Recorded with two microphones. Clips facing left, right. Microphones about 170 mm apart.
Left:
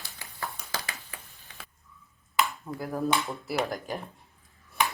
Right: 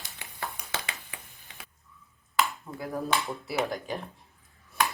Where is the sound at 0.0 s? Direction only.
20° right (ahead or behind).